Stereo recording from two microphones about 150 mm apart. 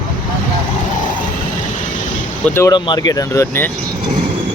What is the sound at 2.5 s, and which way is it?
Speech, 20° left (ahead or behind).